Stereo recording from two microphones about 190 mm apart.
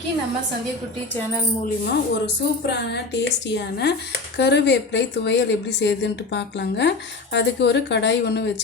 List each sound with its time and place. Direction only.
1.8 s a woman's voice: 60° left (ahead or behind)